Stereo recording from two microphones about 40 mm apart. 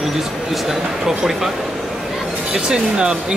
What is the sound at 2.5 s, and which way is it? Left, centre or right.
Speech, centre.